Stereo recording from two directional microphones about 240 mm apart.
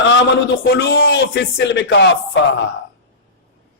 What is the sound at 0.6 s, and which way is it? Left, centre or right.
Speech, left.